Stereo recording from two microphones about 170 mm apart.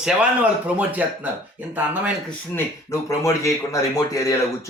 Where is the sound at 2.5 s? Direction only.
15° left (ahead or behind).